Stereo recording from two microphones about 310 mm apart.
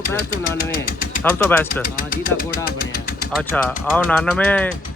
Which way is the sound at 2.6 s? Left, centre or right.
Left.